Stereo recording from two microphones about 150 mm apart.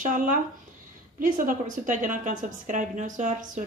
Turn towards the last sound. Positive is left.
turn(degrees=-55)  # may be behind; listen again after turning